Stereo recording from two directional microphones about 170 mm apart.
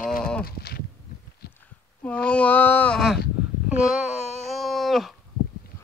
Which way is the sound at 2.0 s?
5° left (ahead or behind).